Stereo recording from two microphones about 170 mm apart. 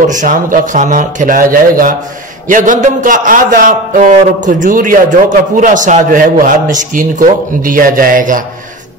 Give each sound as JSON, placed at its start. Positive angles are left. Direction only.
{"t": 0.0, "sound": "a man's voice", "side_deg": -50}